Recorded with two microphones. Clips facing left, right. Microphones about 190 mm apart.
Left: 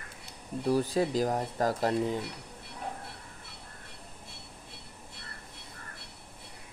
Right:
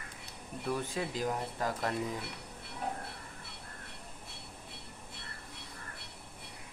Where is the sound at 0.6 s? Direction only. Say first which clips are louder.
Left 8 dB; 35° left (ahead or behind).